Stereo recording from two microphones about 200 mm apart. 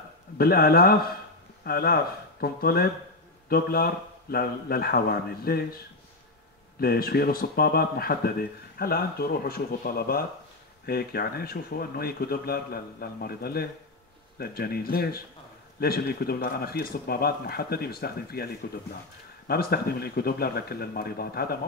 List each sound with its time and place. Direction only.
0.4 s speech: 50° left (ahead or behind)
6.8 s speech: 50° left (ahead or behind)